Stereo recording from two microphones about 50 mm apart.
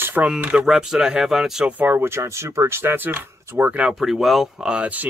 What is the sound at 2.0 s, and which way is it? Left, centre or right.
Speech, right.